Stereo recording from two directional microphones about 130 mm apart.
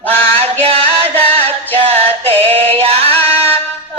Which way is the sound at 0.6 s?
45° right (ahead or behind).